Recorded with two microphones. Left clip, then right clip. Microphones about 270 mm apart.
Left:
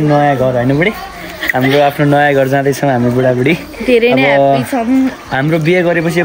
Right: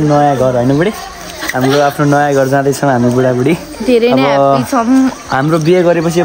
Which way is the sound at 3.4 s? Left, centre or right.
Centre.